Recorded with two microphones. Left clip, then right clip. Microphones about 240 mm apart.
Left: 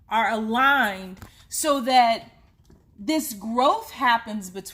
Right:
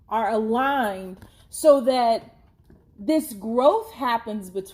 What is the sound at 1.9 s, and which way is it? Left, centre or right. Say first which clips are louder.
Speech: left 2 dB; left.